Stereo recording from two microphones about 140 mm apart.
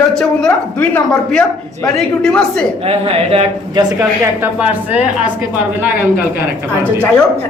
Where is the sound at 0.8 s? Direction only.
5° left (ahead or behind).